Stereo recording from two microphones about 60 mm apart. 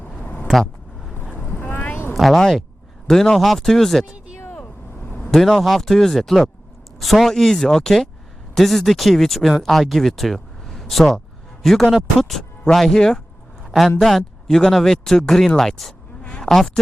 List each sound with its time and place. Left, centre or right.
0.2 s a sound: left
0.5 s vehicle: centre
1.1 s vehicle: left
1.5 s vehicle: left
2.1 s speech: centre
4.5 s vehicle: left
5.3 s a man's voice: centre
16.2 s a sound: centre
16.5 s speech: centre